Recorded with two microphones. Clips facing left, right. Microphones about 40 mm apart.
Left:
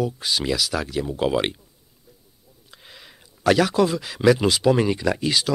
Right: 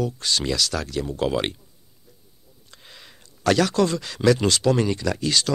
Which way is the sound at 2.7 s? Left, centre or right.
Centre.